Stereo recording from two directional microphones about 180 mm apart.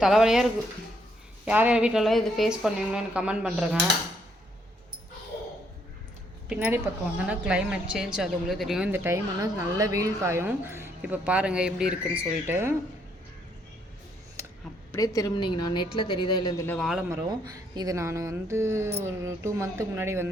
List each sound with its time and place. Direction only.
0.0 s speech: centre (ahead or behind)
6.5 s speech: 10° right (ahead or behind)
14.9 s a woman's voice: 20° left (ahead or behind)
16.6 s speech: centre (ahead or behind)
17.1 s speech: 20° right (ahead or behind)